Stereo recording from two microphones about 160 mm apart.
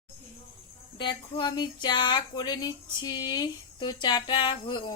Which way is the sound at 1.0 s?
30° left (ahead or behind).